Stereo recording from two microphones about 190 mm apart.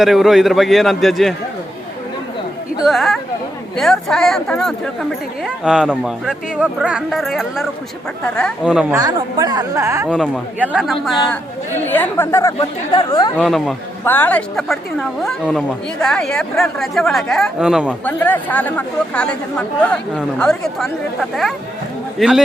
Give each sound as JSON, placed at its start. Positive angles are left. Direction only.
{"t": 0.0, "sound": "speech", "side_deg": 0}
{"t": 2.8, "sound": "speech", "side_deg": 0}
{"t": 8.6, "sound": "a woman's voice", "side_deg": -5}
{"t": 9.0, "sound": "a woman's voice", "side_deg": -20}
{"t": 10.1, "sound": "speech", "side_deg": 5}
{"t": 11.9, "sound": "speech", "side_deg": 10}
{"t": 13.4, "sound": "speech", "side_deg": 0}
{"t": 14.0, "sound": "speech", "side_deg": 10}
{"t": 18.0, "sound": "speech", "side_deg": 10}